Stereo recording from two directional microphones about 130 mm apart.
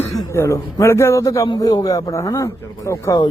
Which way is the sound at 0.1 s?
25° left (ahead or behind).